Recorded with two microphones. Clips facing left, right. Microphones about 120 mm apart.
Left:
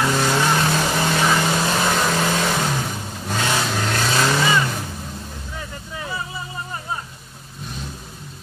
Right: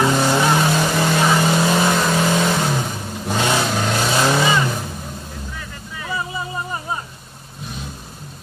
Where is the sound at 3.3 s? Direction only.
15° right (ahead or behind).